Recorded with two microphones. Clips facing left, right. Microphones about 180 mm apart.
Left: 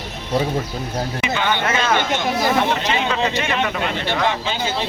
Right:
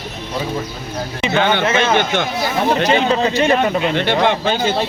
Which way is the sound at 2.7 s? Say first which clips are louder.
Right 6 dB; 35° right (ahead or behind).